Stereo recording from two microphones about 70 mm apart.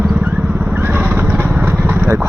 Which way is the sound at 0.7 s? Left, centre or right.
Right.